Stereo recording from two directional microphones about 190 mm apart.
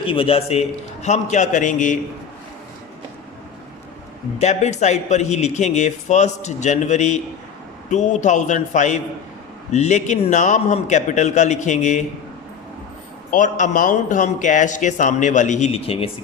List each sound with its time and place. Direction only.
0.0 s a man's voice: 30° left (ahead or behind)
4.4 s speech: 35° left (ahead or behind)
13.3 s speech: 45° left (ahead or behind)